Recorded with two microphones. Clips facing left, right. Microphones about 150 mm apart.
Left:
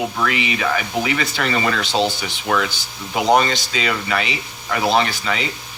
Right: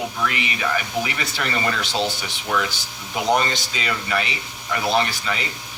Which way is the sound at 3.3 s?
90° left.